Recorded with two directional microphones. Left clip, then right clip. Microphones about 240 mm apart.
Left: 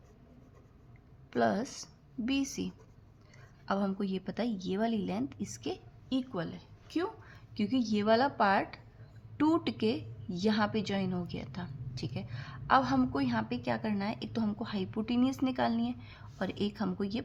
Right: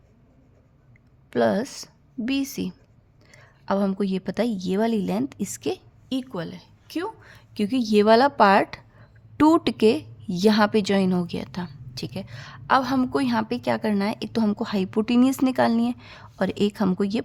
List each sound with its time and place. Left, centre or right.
1.3 s a woman's voice: right